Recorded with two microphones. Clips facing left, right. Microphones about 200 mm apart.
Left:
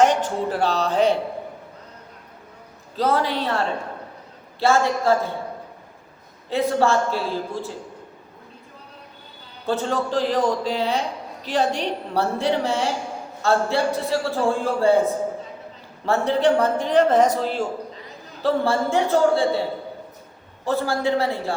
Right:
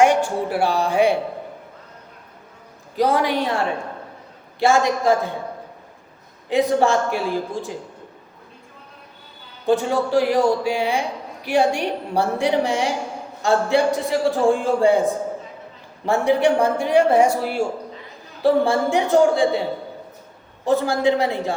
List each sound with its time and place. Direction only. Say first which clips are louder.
0.0 s speech: right 2 dB; 10° right (ahead or behind)
2.9 s a man's voice: right 3 dB; 15° right (ahead or behind)
6.5 s a man's voice: right 2 dB; 15° right (ahead or behind)
9.6 s a man's voice: right 4 dB; 15° right (ahead or behind)
20.7 s a man's voice: right 4 dB; 15° right (ahead or behind)